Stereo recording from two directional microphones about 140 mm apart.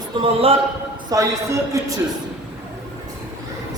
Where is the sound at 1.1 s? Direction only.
25° right (ahead or behind).